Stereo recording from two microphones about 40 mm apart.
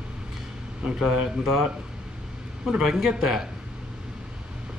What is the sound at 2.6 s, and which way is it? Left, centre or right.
Speech, centre.